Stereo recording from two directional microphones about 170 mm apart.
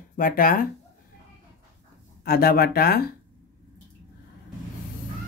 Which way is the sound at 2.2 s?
65° left (ahead or behind).